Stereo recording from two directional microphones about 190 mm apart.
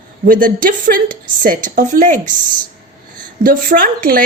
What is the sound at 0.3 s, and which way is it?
Speech, 45° right (ahead or behind).